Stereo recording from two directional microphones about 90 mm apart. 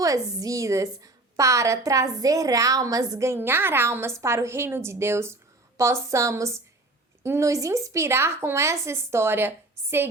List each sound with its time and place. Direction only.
0.0 s a woman's voice: 40° right (ahead or behind)